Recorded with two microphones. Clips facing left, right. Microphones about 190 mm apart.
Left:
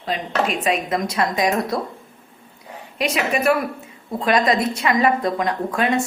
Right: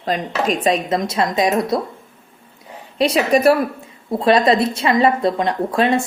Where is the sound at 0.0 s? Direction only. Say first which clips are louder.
Right 2 dB; 40° right (ahead or behind); by 1.8 s 25° right (ahead or behind).